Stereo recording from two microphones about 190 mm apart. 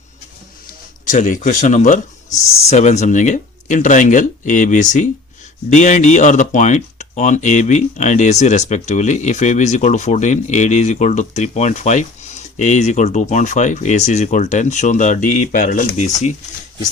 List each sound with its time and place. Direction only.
1.0 s speech: 40° left (ahead or behind)